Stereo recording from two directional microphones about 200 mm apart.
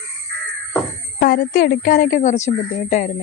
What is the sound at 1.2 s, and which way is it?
A woman's voice, 50° left (ahead or behind).